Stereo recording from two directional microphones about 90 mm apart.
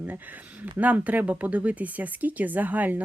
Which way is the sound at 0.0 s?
20° right (ahead or behind).